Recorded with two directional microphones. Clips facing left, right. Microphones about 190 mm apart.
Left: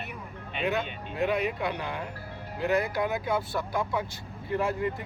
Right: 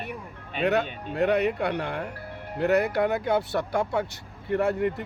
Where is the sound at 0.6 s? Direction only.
65° right (ahead or behind).